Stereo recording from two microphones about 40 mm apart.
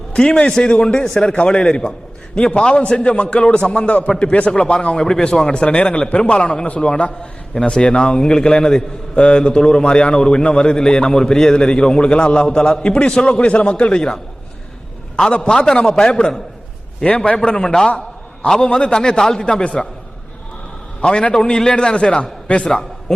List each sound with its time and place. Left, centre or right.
0.1 s a man's voice: left
4.9 s a man's voice: centre
5.6 s a man's voice: left
15.4 s a man's voice: centre
21.0 s a man's voice: left